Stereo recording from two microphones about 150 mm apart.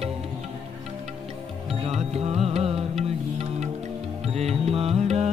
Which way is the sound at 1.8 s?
45° right (ahead or behind).